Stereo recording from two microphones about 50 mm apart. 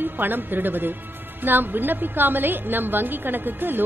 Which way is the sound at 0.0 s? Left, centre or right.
Right.